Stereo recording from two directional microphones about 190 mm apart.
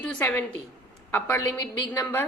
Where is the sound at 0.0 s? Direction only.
5° left (ahead or behind).